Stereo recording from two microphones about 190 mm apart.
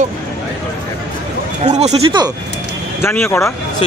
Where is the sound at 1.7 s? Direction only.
35° right (ahead or behind).